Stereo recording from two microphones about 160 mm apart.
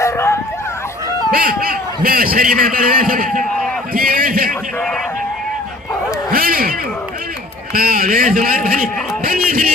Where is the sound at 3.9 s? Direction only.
65° right (ahead or behind).